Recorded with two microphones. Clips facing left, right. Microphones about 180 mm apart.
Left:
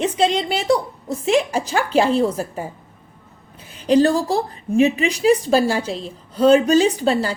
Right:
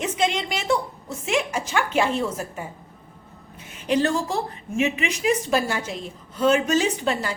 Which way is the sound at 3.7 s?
35° left (ahead or behind).